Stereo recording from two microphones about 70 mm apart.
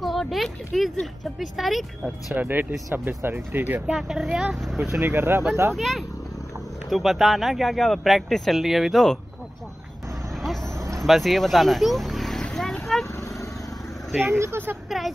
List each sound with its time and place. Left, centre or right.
0.0 s a sound: centre
1.2 s speech: centre
2.3 s speech: right
3.3 s speech: right
3.8 s speech: centre
5.0 s speech: right
5.8 s speech: centre
10.4 s vehicle: centre
13.1 s wild animals: left
14.4 s speech: right
14.9 s a woman's voice: centre